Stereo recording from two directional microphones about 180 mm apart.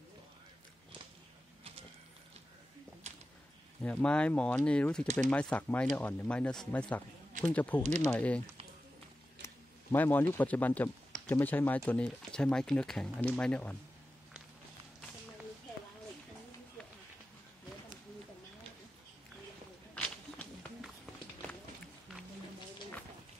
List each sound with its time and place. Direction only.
3.8 s speech: 5° left (ahead or behind)
7.8 s speech: 40° right (ahead or behind)
8.1 s speech: 10° left (ahead or behind)
9.9 s speech: 10° left (ahead or behind)
19.9 s walk: 5° left (ahead or behind)